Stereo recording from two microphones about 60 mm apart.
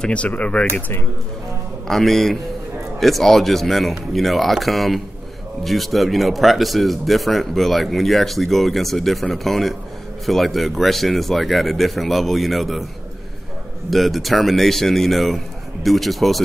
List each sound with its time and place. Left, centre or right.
0.0 s speech: left
1.9 s speech: centre
13.8 s speech: centre